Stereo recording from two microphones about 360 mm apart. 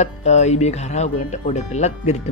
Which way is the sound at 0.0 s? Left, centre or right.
Centre.